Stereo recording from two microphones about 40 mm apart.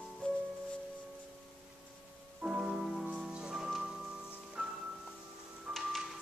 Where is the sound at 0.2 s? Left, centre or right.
Left.